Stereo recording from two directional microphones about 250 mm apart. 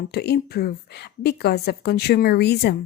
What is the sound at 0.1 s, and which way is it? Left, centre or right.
A woman's voice, left.